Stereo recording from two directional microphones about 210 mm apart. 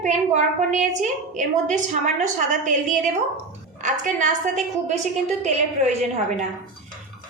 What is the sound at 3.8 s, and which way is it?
Music, 35° right (ahead or behind).